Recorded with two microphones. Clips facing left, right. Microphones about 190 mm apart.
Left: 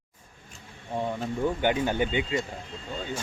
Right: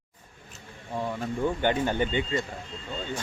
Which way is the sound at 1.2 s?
10° left (ahead or behind).